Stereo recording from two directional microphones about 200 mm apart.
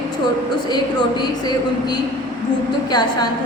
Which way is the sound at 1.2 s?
20° left (ahead or behind).